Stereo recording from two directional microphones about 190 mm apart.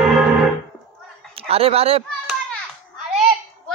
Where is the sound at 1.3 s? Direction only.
30° right (ahead or behind).